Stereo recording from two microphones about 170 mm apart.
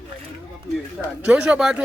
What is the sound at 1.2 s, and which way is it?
Speech, 5° right (ahead or behind).